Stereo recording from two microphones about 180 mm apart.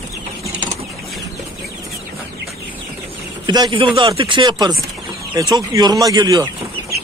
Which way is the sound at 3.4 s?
25° right (ahead or behind).